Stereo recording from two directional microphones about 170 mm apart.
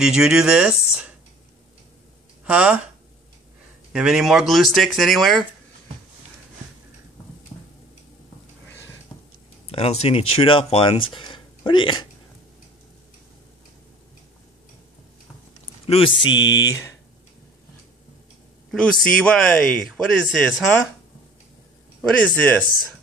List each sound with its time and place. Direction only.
0.0 s speech: 5° right (ahead or behind)
2.4 s speech: 5° right (ahead or behind)
3.9 s speech: 5° right (ahead or behind)
9.7 s speech: 35° left (ahead or behind)
15.9 s speech: 30° left (ahead or behind)
18.7 s a man's voice: 5° left (ahead or behind)
22.2 s speech: 10° left (ahead or behind)